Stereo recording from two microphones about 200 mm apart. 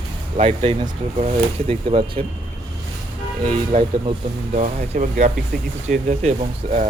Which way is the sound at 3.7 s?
35° right (ahead or behind).